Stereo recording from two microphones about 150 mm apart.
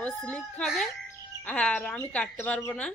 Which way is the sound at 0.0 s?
5° left (ahead or behind).